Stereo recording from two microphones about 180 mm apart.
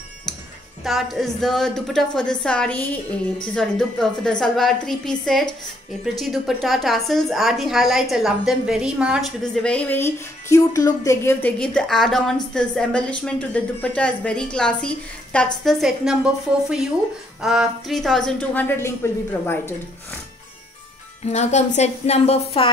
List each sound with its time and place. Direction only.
0.8 s a woman's voice: centre (ahead or behind)
17.4 s a woman's voice: centre (ahead or behind); by 19.7 s 15° left (ahead or behind)
21.3 s a woman's voice: 40° left (ahead or behind)